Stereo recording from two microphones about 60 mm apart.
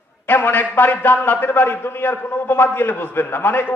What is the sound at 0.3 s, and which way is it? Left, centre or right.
A man's voice, left.